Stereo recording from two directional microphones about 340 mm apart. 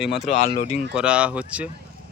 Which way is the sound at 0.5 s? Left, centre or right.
Left.